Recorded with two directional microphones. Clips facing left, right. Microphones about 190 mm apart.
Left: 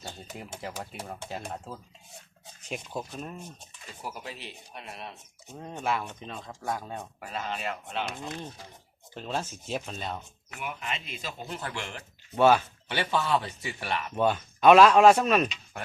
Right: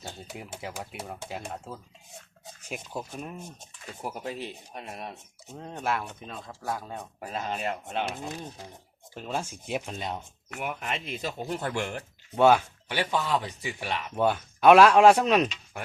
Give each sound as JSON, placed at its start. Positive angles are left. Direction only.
{"t": 0.0, "sound": "speech", "side_deg": -5}
{"t": 4.0, "sound": "speech", "side_deg": -50}
{"t": 5.5, "sound": "speech", "side_deg": 5}
{"t": 7.2, "sound": "speech", "side_deg": -40}
{"t": 9.1, "sound": "speech", "side_deg": -10}
{"t": 10.6, "sound": "speech", "side_deg": -55}
{"t": 12.4, "sound": "speech", "side_deg": -10}